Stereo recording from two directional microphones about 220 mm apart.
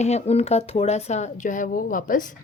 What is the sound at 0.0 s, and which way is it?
A woman's voice, 30° left (ahead or behind).